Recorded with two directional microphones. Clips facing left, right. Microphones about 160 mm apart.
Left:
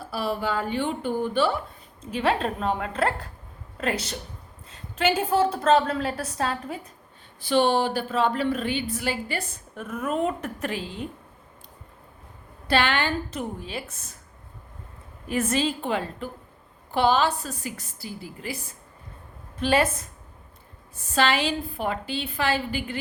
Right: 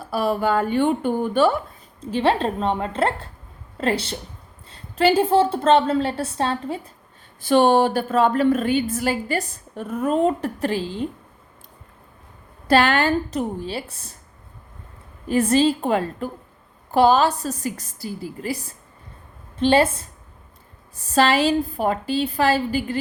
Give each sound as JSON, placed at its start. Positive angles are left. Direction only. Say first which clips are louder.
{"t": 0.1, "sound": "a woman's voice", "louder": "right 7 dB", "side_deg": -50}
{"t": 2.0, "sound": "a woman's voice", "louder": "right 4 dB", "side_deg": -30}
{"t": 7.4, "sound": "a woman's voice", "louder": "right 5 dB", "side_deg": -50}
{"t": 12.6, "sound": "a woman's voice", "louder": "right 6 dB", "side_deg": -45}
{"t": 15.3, "sound": "a woman's voice", "louder": "right 7 dB", "side_deg": -35}
{"t": 19.5, "sound": "a woman's voice", "louder": "right 5 dB", "side_deg": -30}
{"t": 21.1, "sound": "a woman's voice", "louder": "right 6 dB", "side_deg": -40}